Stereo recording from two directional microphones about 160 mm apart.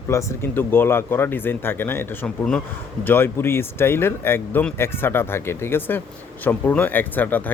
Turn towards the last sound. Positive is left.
turn(degrees=10)  # may be behind; listen again after turning